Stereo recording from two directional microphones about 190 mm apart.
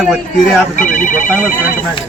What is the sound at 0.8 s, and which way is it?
Speech, 45° left (ahead or behind).